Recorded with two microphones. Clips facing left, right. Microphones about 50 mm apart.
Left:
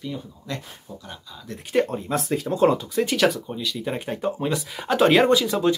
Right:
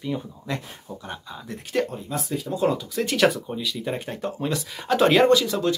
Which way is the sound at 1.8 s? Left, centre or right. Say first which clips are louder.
Left 5 dB; left.